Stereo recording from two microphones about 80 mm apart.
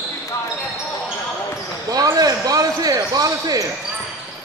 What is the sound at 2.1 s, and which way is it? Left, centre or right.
Speech, right.